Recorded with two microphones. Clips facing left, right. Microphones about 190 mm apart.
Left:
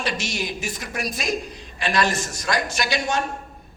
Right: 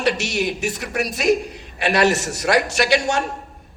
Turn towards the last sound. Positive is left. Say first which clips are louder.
# right 5 dB
turn(degrees=-70)  # may be behind; listen again after turning